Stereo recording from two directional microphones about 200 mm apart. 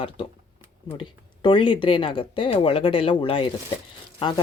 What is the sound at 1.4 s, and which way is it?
Speech, 25° left (ahead or behind).